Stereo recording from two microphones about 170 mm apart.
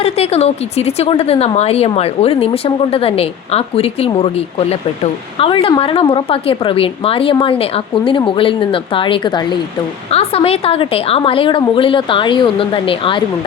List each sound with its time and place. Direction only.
0.0 s a woman's voice: 35° left (ahead or behind)